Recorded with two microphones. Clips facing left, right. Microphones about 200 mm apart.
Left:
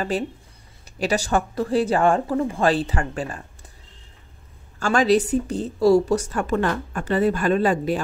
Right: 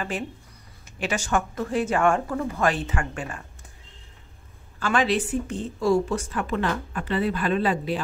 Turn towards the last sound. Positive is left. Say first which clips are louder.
# left 4 dB
turn(degrees=45)  # may be behind; listen again after turning